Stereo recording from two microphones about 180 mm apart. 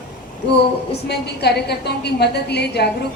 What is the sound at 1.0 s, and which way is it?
A woman's voice, 65° left (ahead or behind).